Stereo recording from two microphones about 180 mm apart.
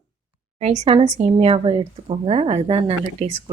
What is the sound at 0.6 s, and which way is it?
A woman's voice, 40° right (ahead or behind).